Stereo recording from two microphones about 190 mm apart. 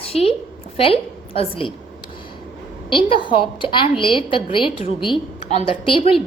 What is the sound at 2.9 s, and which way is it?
A woman's voice, 25° left (ahead or behind).